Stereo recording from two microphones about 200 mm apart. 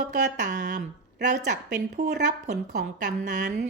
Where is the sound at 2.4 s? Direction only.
40° right (ahead or behind).